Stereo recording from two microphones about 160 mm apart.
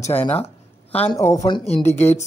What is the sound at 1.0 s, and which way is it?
Speech, 20° left (ahead or behind).